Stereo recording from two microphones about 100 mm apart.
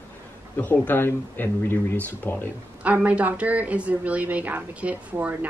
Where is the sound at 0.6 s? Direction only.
20° left (ahead or behind).